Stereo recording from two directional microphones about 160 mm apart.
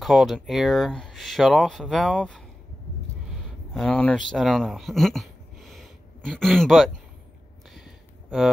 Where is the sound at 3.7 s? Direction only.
5° left (ahead or behind).